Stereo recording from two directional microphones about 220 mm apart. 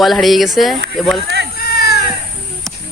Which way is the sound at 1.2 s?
50° right (ahead or behind).